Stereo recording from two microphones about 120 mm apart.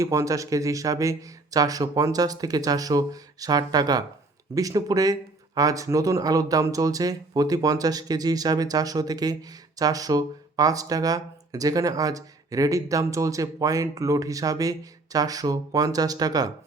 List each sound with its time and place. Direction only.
0.0 s speech: 25° right (ahead or behind)